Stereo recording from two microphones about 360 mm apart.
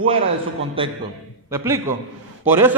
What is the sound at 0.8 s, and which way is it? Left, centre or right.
A man's voice, centre.